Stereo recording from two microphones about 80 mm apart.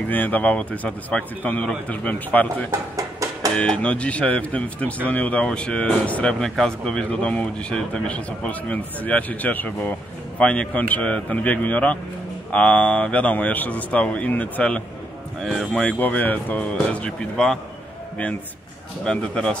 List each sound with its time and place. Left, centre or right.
0.1 s speech: left
2.7 s music: right
3.5 s a man's voice: centre
16.0 s speech: left
19.0 s a man's voice: centre